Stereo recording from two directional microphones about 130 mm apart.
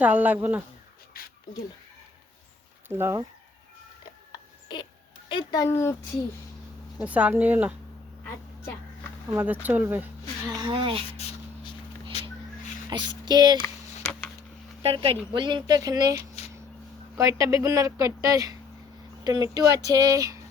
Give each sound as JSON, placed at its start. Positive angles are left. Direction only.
{"t": 0.0, "sound": "speech", "side_deg": -10}
{"t": 2.9, "sound": "speech", "side_deg": -20}
{"t": 5.3, "sound": "speech", "side_deg": 35}
{"t": 5.6, "sound": "speech", "side_deg": 20}
{"t": 7.0, "sound": "speech", "side_deg": -10}
{"t": 9.3, "sound": "speech", "side_deg": -15}
{"t": 10.6, "sound": "speech", "side_deg": -40}
{"t": 12.9, "sound": "speech", "side_deg": -35}
{"t": 14.0, "sound": "a sound", "side_deg": 15}
{"t": 14.8, "sound": "speech", "side_deg": -40}